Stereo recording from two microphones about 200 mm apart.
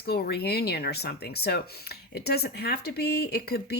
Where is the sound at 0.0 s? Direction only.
50° left (ahead or behind).